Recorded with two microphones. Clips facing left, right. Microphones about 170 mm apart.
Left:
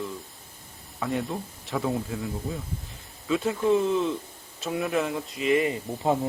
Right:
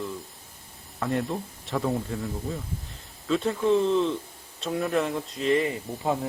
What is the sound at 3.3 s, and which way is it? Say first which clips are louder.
A man's voice: even; centre (ahead or behind).